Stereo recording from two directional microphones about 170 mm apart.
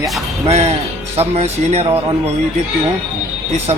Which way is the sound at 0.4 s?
35° right (ahead or behind).